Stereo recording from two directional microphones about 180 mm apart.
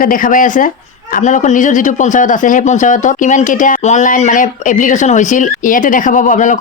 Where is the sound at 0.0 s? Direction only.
50° left (ahead or behind).